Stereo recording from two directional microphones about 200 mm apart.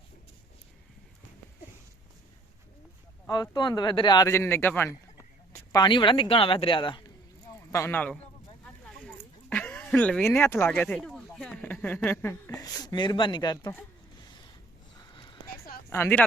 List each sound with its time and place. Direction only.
3.2 s speech: 20° left (ahead or behind)
5.7 s speech: 25° left (ahead or behind)
7.4 s a sound: 15° left (ahead or behind)
8.6 s speech: 5° left (ahead or behind); by 13.7 s 20° left (ahead or behind)
15.1 s clip-clop: 25° left (ahead or behind)
15.9 s speech: 10° left (ahead or behind)